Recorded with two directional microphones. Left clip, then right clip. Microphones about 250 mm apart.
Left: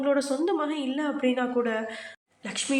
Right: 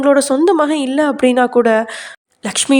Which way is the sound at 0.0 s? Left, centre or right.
Right.